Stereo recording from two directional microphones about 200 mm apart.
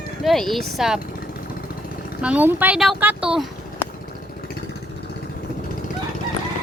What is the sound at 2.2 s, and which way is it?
Speech, 5° right (ahead or behind).